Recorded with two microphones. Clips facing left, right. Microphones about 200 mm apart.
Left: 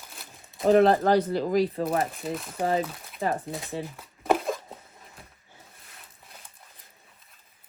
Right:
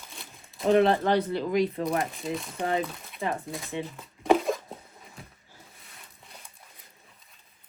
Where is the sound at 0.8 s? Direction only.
40° left (ahead or behind).